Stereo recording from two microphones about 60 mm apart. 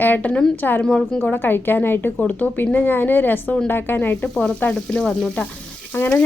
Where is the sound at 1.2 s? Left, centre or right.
Left.